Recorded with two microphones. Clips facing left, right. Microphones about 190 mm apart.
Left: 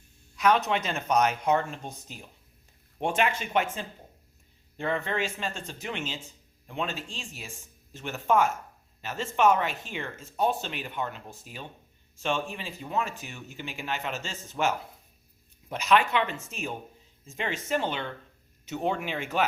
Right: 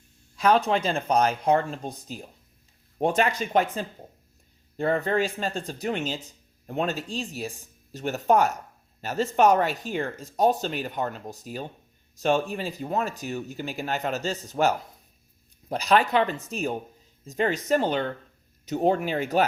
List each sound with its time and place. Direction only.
0.3 s speech: 30° right (ahead or behind)